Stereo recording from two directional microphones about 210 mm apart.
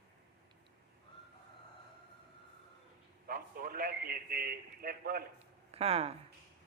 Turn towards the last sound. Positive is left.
turn(degrees=-30)  # may be behind; listen again after turning